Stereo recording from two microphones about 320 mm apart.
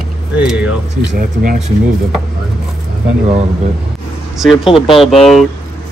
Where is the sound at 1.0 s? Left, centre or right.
Right.